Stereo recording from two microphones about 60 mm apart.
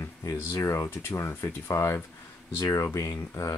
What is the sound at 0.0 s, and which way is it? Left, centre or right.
Speech, left.